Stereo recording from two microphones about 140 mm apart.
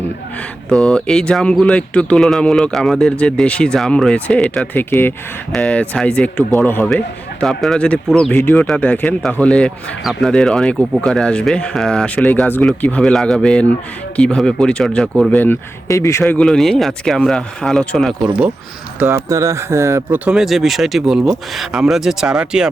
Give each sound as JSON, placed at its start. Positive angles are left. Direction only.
{"t": 0.7, "sound": "speech", "side_deg": 5}
{"t": 15.3, "sound": "speech", "side_deg": 15}
{"t": 16.2, "sound": "speech", "side_deg": 5}
{"t": 18.9, "sound": "speech", "side_deg": -20}